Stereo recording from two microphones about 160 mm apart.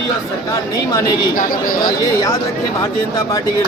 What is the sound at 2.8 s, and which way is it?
Speech, 20° left (ahead or behind).